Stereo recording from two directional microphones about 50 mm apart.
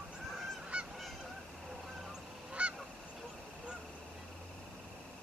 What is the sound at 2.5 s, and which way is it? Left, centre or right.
Goose, right.